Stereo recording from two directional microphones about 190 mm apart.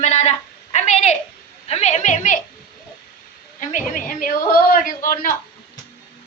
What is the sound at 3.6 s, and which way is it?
A woman's voice, 45° left (ahead or behind).